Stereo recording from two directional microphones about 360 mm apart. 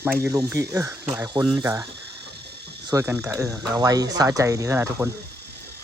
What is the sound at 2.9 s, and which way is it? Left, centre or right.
Speech, centre.